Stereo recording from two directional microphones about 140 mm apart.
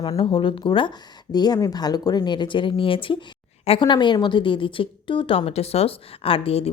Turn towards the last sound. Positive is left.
turn(degrees=45)  # may be behind; listen again after turning